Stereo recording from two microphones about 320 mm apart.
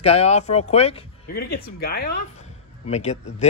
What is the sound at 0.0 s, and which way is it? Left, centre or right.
A man's voice, centre.